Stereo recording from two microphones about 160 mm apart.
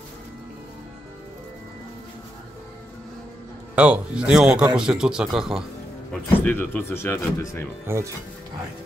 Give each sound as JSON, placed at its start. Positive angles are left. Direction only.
{"t": 3.7, "sound": "speech", "side_deg": -5}
{"t": 6.1, "sound": "speech", "side_deg": 10}
{"t": 7.8, "sound": "speech", "side_deg": -15}